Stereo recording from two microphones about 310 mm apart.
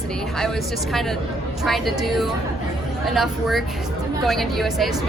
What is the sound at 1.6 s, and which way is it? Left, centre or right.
A woman's voice, centre.